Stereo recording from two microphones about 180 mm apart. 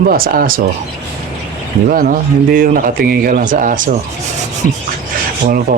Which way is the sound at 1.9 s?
50° right (ahead or behind).